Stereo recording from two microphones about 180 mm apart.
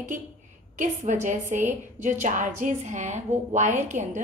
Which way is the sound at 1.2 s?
45° right (ahead or behind).